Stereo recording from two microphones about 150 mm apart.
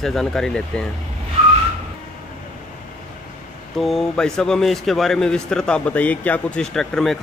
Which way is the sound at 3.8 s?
Centre (ahead or behind).